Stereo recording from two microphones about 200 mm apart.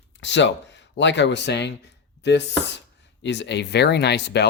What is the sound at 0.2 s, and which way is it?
Speech, 65° left (ahead or behind).